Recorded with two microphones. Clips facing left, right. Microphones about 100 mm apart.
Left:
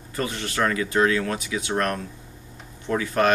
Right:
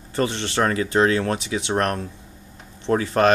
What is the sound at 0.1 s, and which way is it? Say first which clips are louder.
Speech: right 5 dB; 30° right (ahead or behind).